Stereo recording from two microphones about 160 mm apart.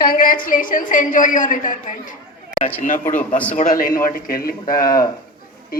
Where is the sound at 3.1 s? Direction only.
10° left (ahead or behind).